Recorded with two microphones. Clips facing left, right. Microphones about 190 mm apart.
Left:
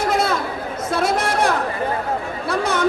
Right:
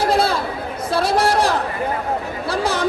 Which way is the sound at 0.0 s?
30° right (ahead or behind).